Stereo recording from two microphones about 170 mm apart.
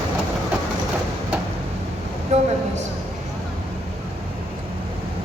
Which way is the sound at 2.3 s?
40° right (ahead or behind).